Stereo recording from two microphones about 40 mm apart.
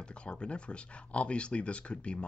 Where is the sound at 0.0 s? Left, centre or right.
Left.